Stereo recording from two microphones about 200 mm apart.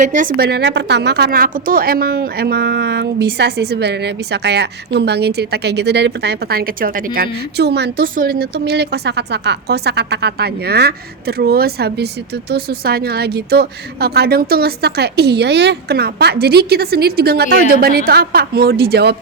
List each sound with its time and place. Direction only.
0.0 s a woman's voice: 40° right (ahead or behind)